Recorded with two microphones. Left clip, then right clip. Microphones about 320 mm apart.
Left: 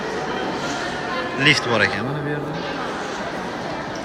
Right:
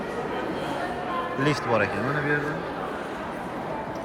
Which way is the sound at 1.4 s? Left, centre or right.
Centre.